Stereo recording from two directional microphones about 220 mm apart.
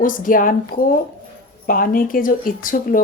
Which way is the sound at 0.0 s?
40° left (ahead or behind).